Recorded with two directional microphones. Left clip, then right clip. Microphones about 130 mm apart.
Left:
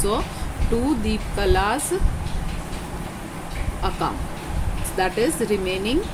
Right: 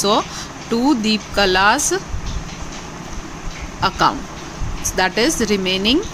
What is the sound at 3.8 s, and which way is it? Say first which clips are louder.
Speech: right 10 dB; 90° right.